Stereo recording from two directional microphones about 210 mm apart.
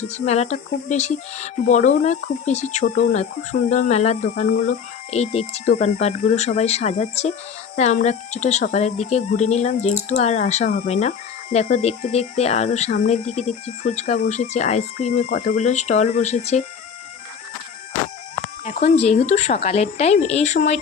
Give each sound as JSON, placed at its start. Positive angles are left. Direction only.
{"t": 0.1, "sound": "speech", "side_deg": 35}
{"t": 18.4, "sound": "speech", "side_deg": 35}